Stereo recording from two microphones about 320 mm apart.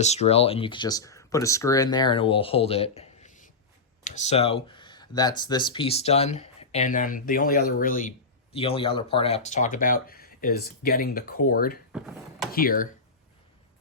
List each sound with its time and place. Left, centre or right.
0.0 s speech: centre
11.9 s a sound: centre
12.5 s speech: left